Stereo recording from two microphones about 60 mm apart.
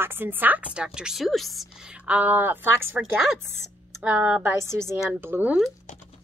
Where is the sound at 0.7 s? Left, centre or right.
Centre.